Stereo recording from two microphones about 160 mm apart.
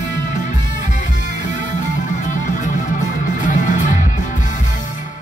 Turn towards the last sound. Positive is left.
turn(degrees=50)  # may be behind; listen again after turning